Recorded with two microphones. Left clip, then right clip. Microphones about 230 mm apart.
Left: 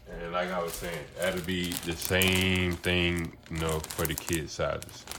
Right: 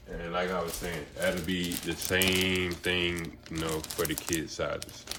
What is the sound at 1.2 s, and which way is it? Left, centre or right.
Speech, left.